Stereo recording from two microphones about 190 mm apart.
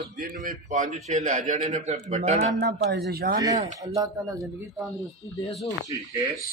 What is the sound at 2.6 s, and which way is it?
Speech, 60° right (ahead or behind).